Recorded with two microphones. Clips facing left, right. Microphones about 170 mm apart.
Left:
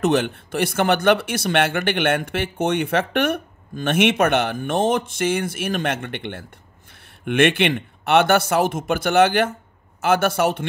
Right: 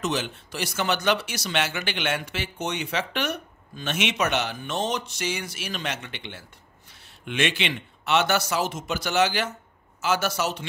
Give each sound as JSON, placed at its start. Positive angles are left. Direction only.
{"t": 0.0, "sound": "speech", "side_deg": 60}